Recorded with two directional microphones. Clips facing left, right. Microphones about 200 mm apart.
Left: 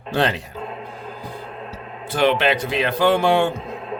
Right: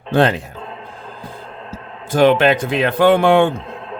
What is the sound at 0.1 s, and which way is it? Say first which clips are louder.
Speech: right 6 dB; 50° right (ahead or behind).